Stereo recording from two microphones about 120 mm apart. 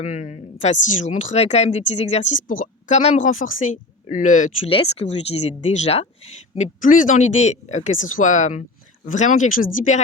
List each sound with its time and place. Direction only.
0.0 s speech: 85° left
4.6 s speech: 50° left (ahead or behind)
5.0 s speech: 70° left (ahead or behind)
6.6 s speech: 90° left